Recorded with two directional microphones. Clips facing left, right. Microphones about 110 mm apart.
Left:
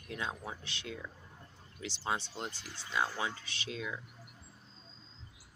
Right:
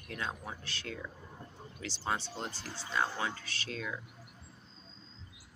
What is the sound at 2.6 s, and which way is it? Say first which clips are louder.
Speech: right 4 dB; 45° right (ahead or behind).